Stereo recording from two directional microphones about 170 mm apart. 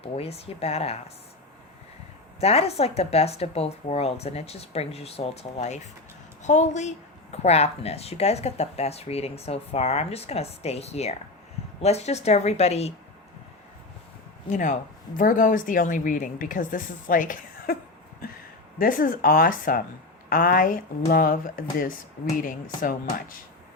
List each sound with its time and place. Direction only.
0.0 s speech: 35° left (ahead or behind)
2.4 s speech: 35° left (ahead or behind)
14.5 s speech: 45° left (ahead or behind)
18.8 s speech: 55° left (ahead or behind)